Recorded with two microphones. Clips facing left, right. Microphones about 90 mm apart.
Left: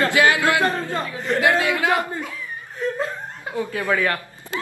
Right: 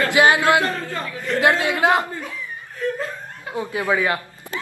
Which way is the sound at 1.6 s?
25° right (ahead or behind).